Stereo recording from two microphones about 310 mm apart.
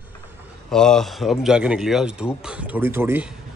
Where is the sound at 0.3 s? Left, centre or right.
Centre.